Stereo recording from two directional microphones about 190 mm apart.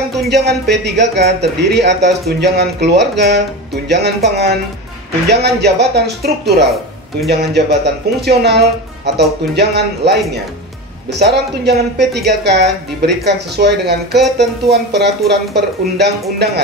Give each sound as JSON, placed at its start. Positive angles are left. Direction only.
{"t": 0.3, "sound": "speech", "side_deg": -60}